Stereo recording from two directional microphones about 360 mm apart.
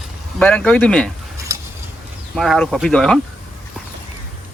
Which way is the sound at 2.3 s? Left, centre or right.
Centre.